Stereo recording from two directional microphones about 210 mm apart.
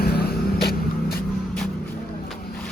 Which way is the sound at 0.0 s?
45° left (ahead or behind).